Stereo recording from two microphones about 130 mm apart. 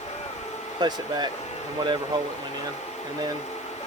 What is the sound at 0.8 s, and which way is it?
Speech, 35° right (ahead or behind).